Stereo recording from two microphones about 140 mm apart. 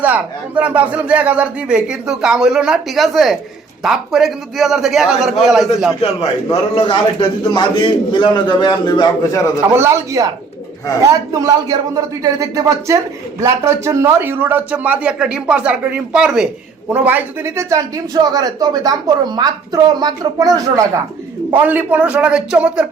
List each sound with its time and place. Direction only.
0.0 s a man's voice: 10° right (ahead or behind)
6.5 s a man's voice: 40° left (ahead or behind)
9.7 s speech: 20° right (ahead or behind)
21.5 s speech: 10° right (ahead or behind)